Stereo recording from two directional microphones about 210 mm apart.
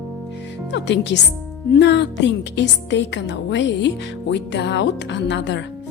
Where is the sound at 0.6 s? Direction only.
55° left (ahead or behind).